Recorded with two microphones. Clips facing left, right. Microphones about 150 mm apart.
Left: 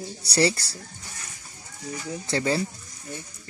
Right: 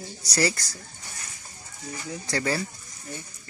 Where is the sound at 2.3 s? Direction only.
25° left (ahead or behind).